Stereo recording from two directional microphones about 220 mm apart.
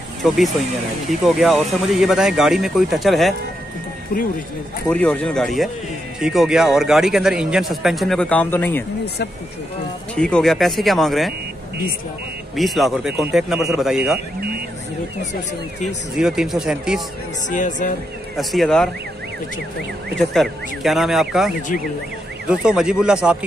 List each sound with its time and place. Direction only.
1.2 s speech: centre (ahead or behind)
4.8 s speech: 5° left (ahead or behind)
10.1 s speech: 5° left (ahead or behind)
12.5 s speech: centre (ahead or behind)
16.2 s speech: 5° right (ahead or behind)
17.5 s speech: 35° left (ahead or behind)
18.3 s speech: centre (ahead or behind)
20.2 s speech: centre (ahead or behind)